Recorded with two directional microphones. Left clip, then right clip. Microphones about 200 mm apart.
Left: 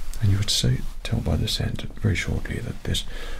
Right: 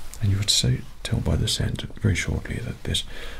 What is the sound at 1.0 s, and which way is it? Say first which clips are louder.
Speech: right 1 dB; 40° right (ahead or behind).